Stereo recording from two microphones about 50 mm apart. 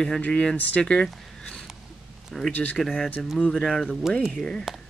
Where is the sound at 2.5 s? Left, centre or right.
Left.